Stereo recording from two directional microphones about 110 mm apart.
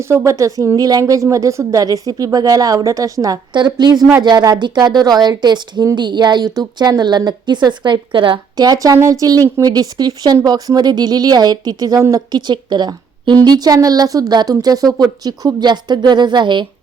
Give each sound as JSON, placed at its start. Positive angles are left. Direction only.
{"t": 0.0, "sound": "speech", "side_deg": -25}